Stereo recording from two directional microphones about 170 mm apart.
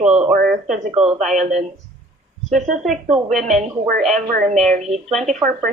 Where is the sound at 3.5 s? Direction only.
Centre (ahead or behind).